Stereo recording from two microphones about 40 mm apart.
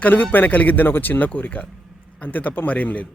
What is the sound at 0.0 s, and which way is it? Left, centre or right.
Speech, left.